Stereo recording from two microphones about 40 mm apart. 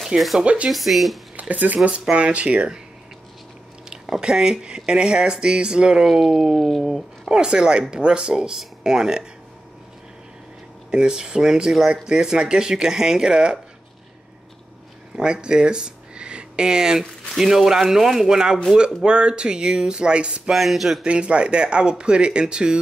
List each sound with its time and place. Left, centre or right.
0.0 s speech: centre
0.4 s speech: right
0.7 s speech: centre
1.5 s speech: right
1.9 s speech: right
4.2 s speech: centre
6.0 s speech: centre
7.2 s speech: centre
10.9 s speech: centre
15.1 s speech: centre
19.0 s speech: right
20.5 s speech: centre
21.0 s speech: right